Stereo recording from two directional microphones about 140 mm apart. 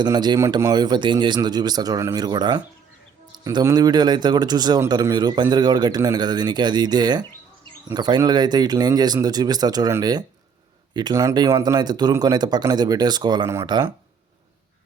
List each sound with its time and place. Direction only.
0.0 s speech: 30° right (ahead or behind)